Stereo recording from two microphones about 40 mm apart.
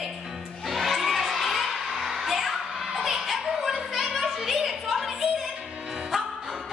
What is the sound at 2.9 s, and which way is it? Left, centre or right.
Music, centre.